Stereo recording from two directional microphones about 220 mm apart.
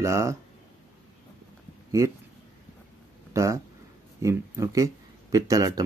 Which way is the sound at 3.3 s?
15° right (ahead or behind).